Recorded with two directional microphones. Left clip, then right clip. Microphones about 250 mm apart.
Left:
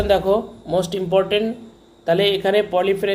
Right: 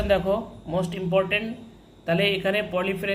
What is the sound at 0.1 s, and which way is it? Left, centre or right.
Speech, left.